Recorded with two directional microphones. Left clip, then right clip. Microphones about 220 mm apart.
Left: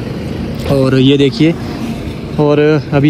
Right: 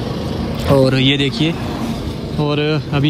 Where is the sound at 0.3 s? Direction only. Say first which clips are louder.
Even; centre (ahead or behind).